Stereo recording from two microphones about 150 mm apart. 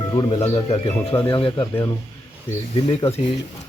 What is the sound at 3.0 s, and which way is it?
Speech, 20° left (ahead or behind).